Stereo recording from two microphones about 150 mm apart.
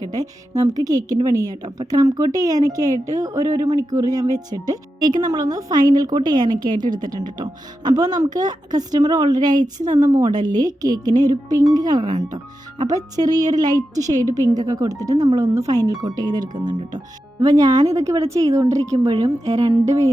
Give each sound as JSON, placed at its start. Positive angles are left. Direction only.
{"t": 0.1, "sound": "a woman's voice", "side_deg": -25}